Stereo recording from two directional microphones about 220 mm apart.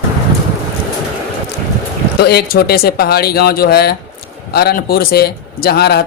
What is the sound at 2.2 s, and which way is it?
Speech, 45° left (ahead or behind).